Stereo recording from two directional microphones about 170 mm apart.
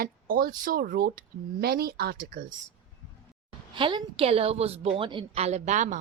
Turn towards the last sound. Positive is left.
turn(degrees=-45)  # may be behind; listen again after turning